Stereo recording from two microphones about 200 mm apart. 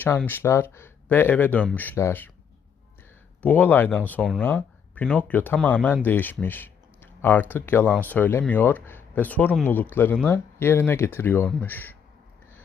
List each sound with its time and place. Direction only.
0.3 s speech: 10° left (ahead or behind)
3.4 s speech: 10° left (ahead or behind)